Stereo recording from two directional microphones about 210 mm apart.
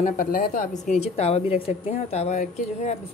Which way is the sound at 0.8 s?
30° left (ahead or behind).